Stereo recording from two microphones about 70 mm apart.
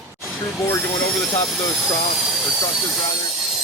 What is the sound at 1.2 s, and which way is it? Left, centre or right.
Speech, left.